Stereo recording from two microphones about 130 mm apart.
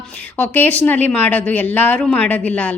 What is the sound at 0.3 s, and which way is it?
A woman's voice, 15° left (ahead or behind).